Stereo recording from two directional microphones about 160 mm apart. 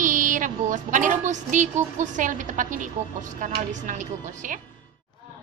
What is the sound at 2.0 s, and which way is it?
A woman's voice, 50° right (ahead or behind).